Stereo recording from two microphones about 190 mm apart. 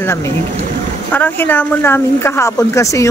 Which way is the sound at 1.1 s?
10° left (ahead or behind).